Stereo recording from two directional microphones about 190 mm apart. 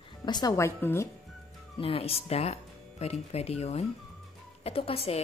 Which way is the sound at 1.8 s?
30° left (ahead or behind).